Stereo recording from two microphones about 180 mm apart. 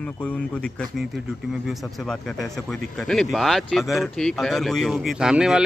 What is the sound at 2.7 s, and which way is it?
Speech, 5° left (ahead or behind).